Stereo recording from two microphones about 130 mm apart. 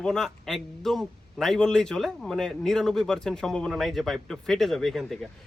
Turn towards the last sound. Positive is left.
turn(degrees=0)  # may be behind; listen again after turning